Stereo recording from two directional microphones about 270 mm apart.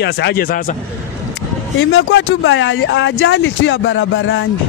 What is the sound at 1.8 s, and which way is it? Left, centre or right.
Speech, left.